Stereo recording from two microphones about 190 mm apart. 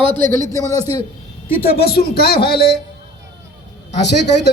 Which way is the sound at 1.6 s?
55° left (ahead or behind).